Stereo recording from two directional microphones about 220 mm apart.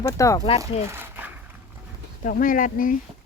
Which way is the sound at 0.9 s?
10° right (ahead or behind).